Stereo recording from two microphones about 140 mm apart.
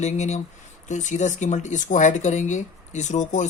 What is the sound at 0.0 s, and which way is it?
Speech, 55° left (ahead or behind).